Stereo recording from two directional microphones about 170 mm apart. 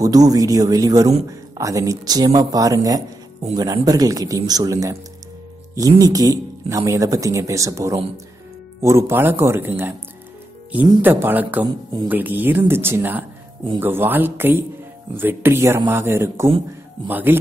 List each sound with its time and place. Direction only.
0.0 s speech: 20° right (ahead or behind)
11.0 s speech: 10° right (ahead or behind)
11.6 s speech: 25° right (ahead or behind)
12.1 s speech: 10° right (ahead or behind)